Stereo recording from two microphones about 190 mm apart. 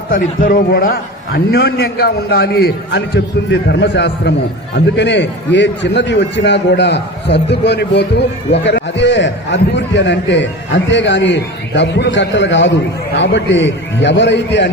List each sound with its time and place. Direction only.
0.1 s a man's voice: 50° left (ahead or behind); by 14.7 s 70° left (ahead or behind)